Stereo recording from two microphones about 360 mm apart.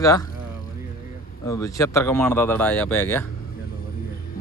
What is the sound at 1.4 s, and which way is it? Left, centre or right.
Speech, centre.